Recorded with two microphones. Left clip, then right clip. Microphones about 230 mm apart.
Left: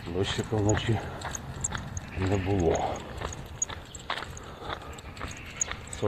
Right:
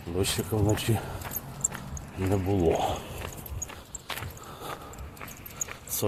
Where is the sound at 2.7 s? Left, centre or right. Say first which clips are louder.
Right 2 dB; right.